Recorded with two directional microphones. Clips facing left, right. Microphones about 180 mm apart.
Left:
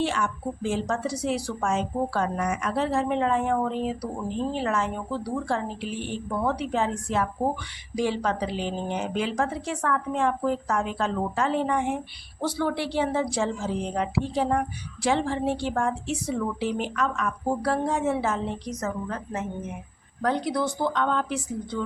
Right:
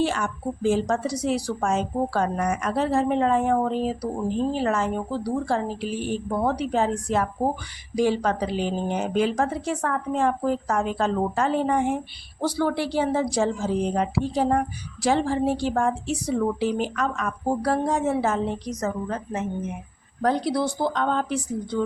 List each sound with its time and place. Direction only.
0.0 s a woman's voice: 40° right (ahead or behind)
18.8 s a woman's voice: 25° right (ahead or behind)
20.2 s a woman's voice: 35° right (ahead or behind)